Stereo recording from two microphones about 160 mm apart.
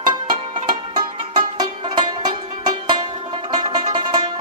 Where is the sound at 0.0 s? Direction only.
30° right (ahead or behind).